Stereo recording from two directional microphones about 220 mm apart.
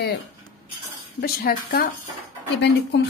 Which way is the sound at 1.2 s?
45° left (ahead or behind).